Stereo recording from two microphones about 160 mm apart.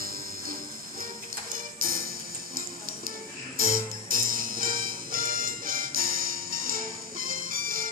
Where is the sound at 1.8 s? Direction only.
60° right (ahead or behind).